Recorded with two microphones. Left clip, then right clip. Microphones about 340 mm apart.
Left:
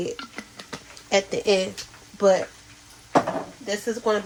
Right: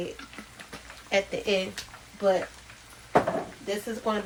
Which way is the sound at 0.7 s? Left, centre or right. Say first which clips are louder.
Left 5 dB; centre.